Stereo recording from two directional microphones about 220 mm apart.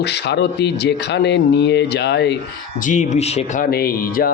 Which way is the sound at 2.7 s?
35° left (ahead or behind).